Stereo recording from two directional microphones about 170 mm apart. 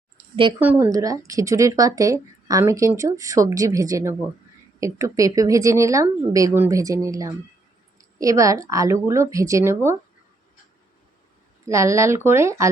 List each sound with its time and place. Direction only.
0.6 s speech: 10° right (ahead or behind)
11.6 s speech: 15° right (ahead or behind)